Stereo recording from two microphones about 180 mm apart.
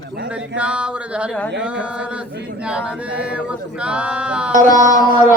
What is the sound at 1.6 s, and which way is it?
Male singing, 5° right (ahead or behind).